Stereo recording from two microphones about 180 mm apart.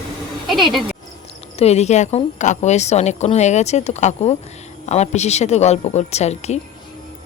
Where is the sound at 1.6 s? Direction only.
35° left (ahead or behind).